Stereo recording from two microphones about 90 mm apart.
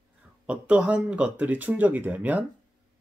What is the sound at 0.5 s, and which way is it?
Speech, 15° right (ahead or behind).